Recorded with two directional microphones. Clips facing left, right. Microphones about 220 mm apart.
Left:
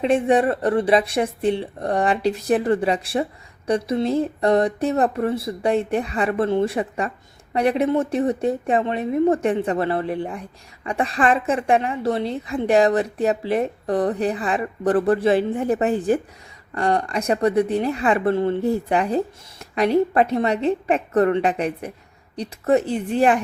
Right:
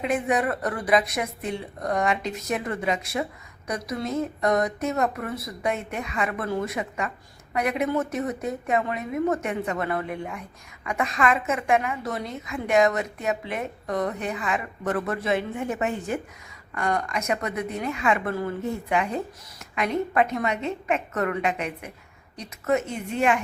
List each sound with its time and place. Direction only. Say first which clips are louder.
0.0 s a woman's voice: left 7 dB; 30° left (ahead or behind)